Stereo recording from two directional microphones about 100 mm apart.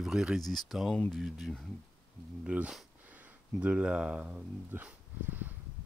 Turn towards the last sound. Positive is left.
turn(degrees=-20)  # may be behind; listen again after turning